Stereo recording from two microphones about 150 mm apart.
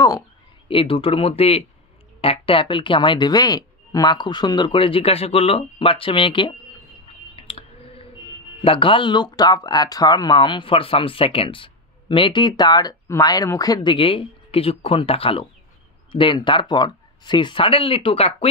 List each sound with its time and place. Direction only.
0.7 s speech: 35° left (ahead or behind)
7.3 s clicking: 40° left (ahead or behind)
8.6 s speech: 35° left (ahead or behind)